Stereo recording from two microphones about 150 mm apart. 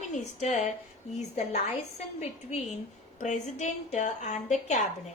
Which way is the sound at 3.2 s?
50° left (ahead or behind).